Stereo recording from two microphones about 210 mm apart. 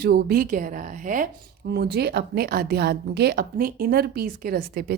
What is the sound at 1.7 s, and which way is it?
A woman's voice, 50° right (ahead or behind).